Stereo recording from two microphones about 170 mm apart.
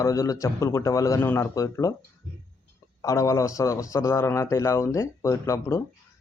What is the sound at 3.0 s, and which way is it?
A man's voice, 15° left (ahead or behind).